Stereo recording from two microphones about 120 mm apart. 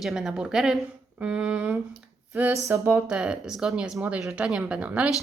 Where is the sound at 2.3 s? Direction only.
15° right (ahead or behind).